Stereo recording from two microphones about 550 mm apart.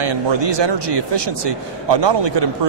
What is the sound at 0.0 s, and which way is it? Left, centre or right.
Speech, right.